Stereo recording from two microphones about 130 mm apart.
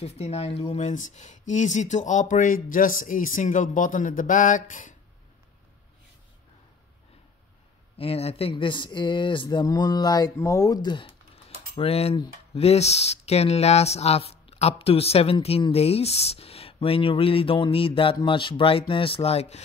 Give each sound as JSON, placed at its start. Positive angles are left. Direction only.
{"t": 0.0, "sound": "speech", "side_deg": 55}
{"t": 8.0, "sound": "speech", "side_deg": 50}